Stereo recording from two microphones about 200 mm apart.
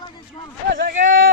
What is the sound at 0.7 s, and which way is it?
Speech, 50° right (ahead or behind).